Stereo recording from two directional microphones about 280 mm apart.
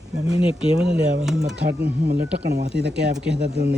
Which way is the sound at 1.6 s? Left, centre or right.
Right.